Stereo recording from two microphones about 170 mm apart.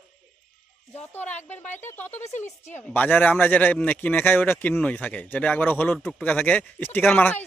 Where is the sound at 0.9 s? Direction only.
10° left (ahead or behind).